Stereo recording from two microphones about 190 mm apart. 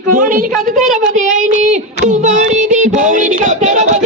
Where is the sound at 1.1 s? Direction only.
40° right (ahead or behind).